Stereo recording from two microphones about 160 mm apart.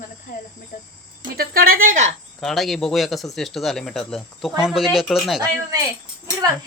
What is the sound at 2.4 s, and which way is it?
Speech, centre (ahead or behind).